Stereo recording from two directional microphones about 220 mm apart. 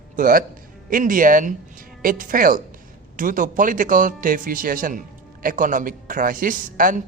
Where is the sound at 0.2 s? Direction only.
40° right (ahead or behind).